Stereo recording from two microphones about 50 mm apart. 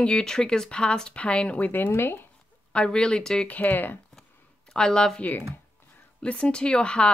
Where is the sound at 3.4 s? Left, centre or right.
Left.